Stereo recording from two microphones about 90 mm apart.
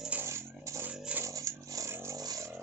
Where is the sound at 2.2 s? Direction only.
45° right (ahead or behind).